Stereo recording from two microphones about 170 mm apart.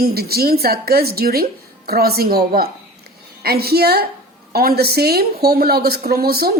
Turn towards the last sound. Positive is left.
turn(degrees=-65)  # may be behind; listen again after turning